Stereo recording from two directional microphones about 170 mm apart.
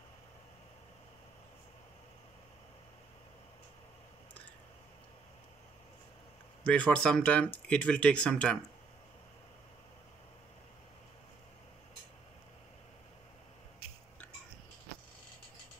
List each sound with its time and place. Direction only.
6.7 s speech: 5° left (ahead or behind)